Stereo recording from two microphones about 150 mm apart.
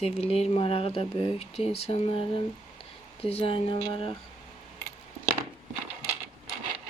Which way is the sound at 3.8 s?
25° left (ahead or behind).